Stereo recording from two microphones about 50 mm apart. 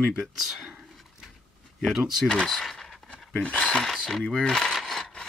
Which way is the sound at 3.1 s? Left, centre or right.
Left.